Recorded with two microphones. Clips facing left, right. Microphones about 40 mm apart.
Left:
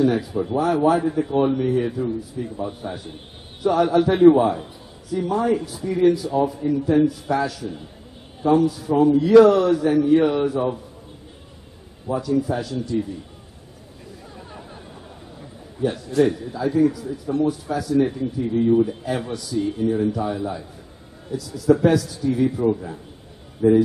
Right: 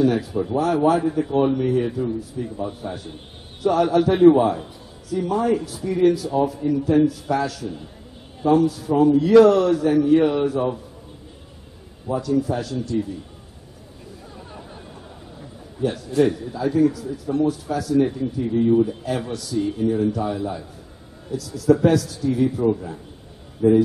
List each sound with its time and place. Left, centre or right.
0.0 s a man's voice: centre
12.1 s a man's voice: centre
14.5 s a sound: centre
15.8 s a man's voice: centre
23.6 s speech: centre